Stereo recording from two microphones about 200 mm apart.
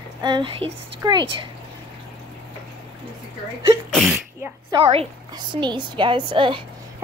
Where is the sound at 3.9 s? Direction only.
Centre (ahead or behind).